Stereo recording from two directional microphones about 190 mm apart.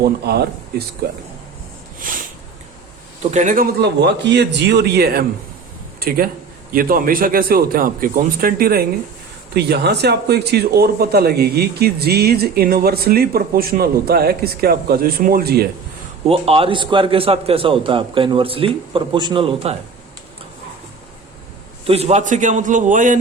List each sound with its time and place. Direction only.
0.0 s a man's voice: 55° right (ahead or behind)
3.3 s a man's voice: 45° right (ahead or behind)
16.2 s a man's voice: 30° right (ahead or behind)
21.8 s a man's voice: 30° right (ahead or behind)